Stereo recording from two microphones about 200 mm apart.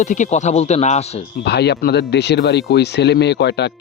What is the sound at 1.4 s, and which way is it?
Speech, 55° left (ahead or behind).